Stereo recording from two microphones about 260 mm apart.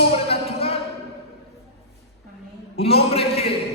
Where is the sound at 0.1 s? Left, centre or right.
Left.